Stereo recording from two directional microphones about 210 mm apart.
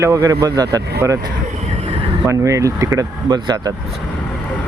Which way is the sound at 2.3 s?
15° right (ahead or behind).